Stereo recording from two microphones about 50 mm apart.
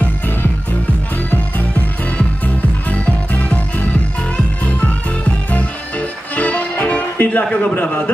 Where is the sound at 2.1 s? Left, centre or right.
Left.